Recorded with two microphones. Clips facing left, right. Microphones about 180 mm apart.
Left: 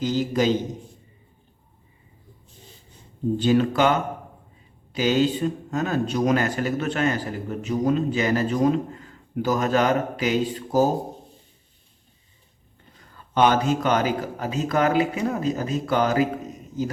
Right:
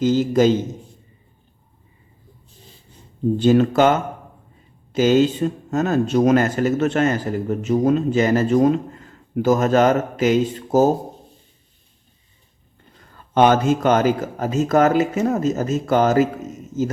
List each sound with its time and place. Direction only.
0.0 s speech: 45° right (ahead or behind)
3.4 s speech: 45° right (ahead or behind)
13.3 s speech: 50° right (ahead or behind)